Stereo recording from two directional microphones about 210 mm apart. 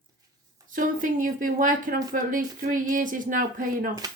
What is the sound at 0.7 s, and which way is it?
Speech, 40° right (ahead or behind).